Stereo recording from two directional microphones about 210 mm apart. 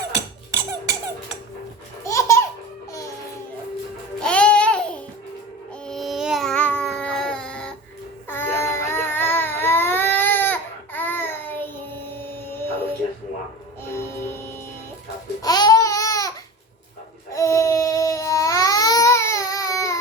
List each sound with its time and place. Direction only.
0.1 s music: 15° right (ahead or behind)
2.0 s baby laughter: 15° left (ahead or behind)
4.2 s babbling: 5° left (ahead or behind)
5.8 s baby cry: centre (ahead or behind)
12.2 s music: 10° left (ahead or behind)
13.8 s music: 10° left (ahead or behind)
15.4 s baby cry: 20° left (ahead or behind)
17.3 s babbling: 15° left (ahead or behind)